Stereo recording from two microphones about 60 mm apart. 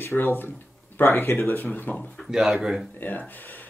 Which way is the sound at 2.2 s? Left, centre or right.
Centre.